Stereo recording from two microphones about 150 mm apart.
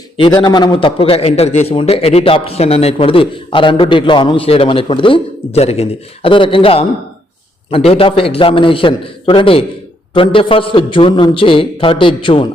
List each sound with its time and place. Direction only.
0.2 s a man's voice: 30° left (ahead or behind)